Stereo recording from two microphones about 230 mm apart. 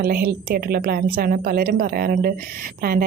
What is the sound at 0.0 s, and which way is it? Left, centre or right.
A woman's voice, right.